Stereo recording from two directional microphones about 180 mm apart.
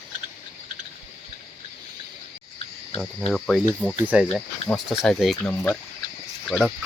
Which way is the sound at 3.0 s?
5° left (ahead or behind).